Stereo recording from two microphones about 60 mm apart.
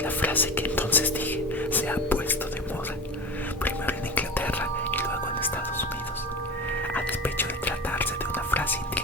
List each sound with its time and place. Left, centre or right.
0.0 s speech: left
3.6 s whispering: left
6.9 s whispering: left